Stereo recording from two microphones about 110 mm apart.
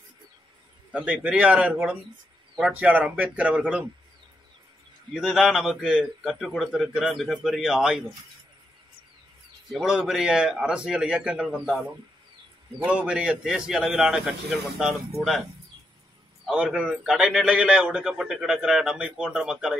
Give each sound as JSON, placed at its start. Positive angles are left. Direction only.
{"t": 0.9, "sound": "speech", "side_deg": -10}
{"t": 5.1, "sound": "a man's voice", "side_deg": -5}
{"t": 9.7, "sound": "a man's voice", "side_deg": -5}
{"t": 12.7, "sound": "a man's voice", "side_deg": -10}
{"t": 16.4, "sound": "a man's voice", "side_deg": -5}